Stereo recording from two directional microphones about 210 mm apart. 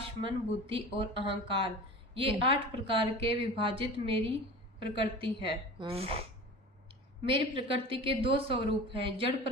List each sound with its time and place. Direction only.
0.3 s a woman's voice: 25° right (ahead or behind)
7.3 s a woman's voice: 25° right (ahead or behind)